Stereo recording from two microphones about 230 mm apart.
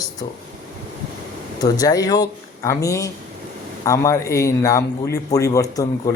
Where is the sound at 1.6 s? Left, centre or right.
Centre.